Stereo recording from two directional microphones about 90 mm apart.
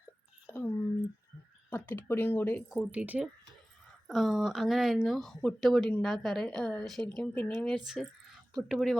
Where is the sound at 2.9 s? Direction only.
15° right (ahead or behind).